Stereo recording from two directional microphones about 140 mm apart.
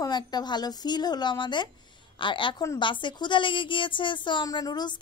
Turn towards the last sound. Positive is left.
turn(degrees=30)  # may be behind; listen again after turning